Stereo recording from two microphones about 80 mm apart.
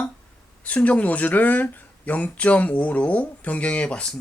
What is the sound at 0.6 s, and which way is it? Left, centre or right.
Speech, centre.